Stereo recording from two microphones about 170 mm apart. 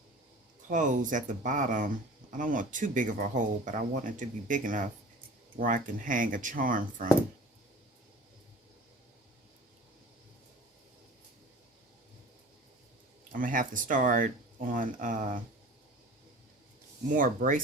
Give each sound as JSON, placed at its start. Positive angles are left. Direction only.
{"t": 0.7, "sound": "speech", "side_deg": -50}
{"t": 13.3, "sound": "speech", "side_deg": -50}
{"t": 17.2, "sound": "speech", "side_deg": -50}